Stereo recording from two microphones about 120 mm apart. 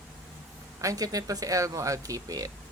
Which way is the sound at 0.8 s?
30° right (ahead or behind).